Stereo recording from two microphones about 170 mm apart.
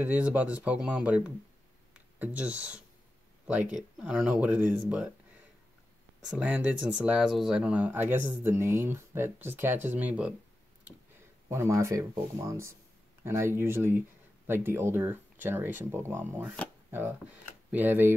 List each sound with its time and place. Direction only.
0.0 s speech: 10° right (ahead or behind)
6.3 s speech: 5° right (ahead or behind)
11.4 s speech: 15° right (ahead or behind)
17.6 s speech: 10° right (ahead or behind)